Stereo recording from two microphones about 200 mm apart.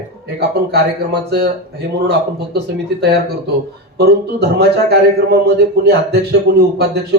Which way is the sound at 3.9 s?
55° right (ahead or behind).